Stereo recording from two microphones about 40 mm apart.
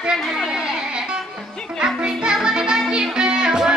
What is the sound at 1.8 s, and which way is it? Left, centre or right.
Music, right.